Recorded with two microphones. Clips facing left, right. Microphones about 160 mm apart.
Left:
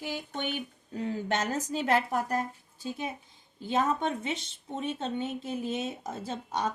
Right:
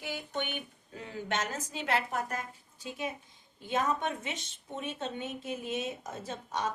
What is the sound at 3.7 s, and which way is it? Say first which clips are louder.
Speech: left 3 dB; 30° left (ahead or behind).